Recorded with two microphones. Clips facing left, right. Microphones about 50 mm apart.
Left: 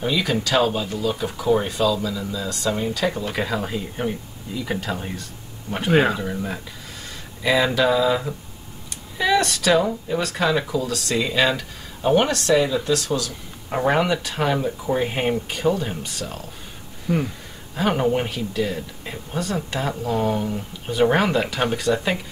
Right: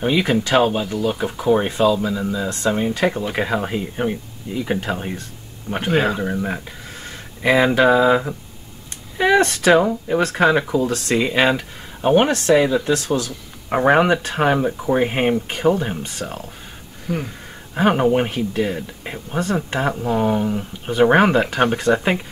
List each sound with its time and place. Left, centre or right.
0.0 s speech: right
3.9 s speech: centre
4.6 s speech: right
5.9 s speech: centre
6.1 s speech: right
9.2 s speech: right
17.1 s speech: centre
17.7 s speech: right